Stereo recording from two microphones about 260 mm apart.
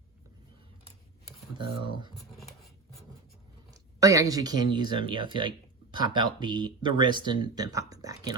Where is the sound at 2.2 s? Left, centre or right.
Centre.